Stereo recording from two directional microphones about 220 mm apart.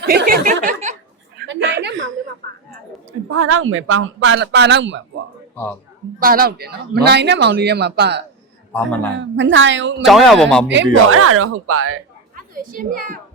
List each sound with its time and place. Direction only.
0.0 s a sound: 45° right (ahead or behind)
1.5 s a sound: 50° right (ahead or behind)
3.3 s speech: 65° right (ahead or behind)
6.1 s speech: 40° right (ahead or behind)
8.7 s a man's voice: 5° left (ahead or behind)
9.1 s speech: 55° right (ahead or behind)
10.1 s speech: centre (ahead or behind)
10.8 s speech: 65° right (ahead or behind)
12.4 s a woman's voice: 40° right (ahead or behind)